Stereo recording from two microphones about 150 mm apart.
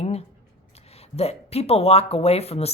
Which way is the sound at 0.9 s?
45° left (ahead or behind).